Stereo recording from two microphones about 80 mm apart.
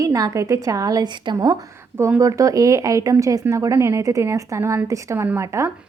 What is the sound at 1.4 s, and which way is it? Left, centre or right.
Speech, right.